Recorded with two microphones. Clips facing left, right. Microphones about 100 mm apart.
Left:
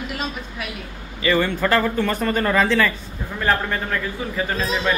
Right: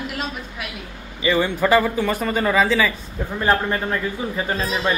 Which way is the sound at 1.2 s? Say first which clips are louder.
Even; 15° right (ahead or behind).